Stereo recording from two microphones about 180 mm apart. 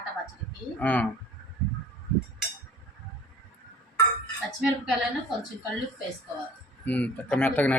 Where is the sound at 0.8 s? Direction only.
5° left (ahead or behind).